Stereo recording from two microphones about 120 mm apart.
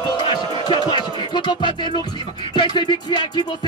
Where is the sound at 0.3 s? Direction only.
40° left (ahead or behind).